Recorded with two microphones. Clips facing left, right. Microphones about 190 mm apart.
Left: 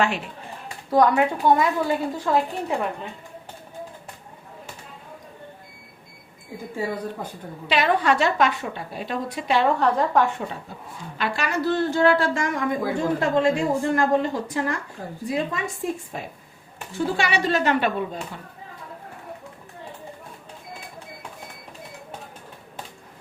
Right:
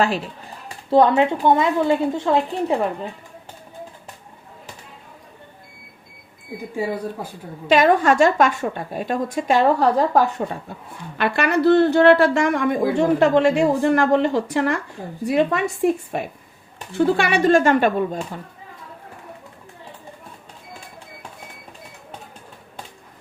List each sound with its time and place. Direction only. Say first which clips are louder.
0.9 s a woman's voice: right 3 dB; 25° right (ahead or behind)
6.7 s speech: right 3 dB; 10° right (ahead or behind)
7.7 s a woman's voice: right 5 dB; 45° right (ahead or behind)
11.2 s speech: right 7 dB; 60° right (ahead or behind)
16.9 s a woman's voice: right 6 dB; 55° right (ahead or behind)